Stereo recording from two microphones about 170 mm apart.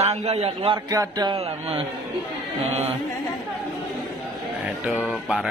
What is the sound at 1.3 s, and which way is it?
Speech, 35° right (ahead or behind).